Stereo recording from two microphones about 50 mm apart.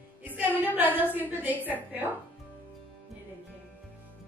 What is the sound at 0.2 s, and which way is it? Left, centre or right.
Music, right.